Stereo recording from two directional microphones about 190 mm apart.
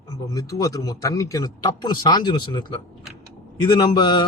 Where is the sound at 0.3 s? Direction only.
15° left (ahead or behind).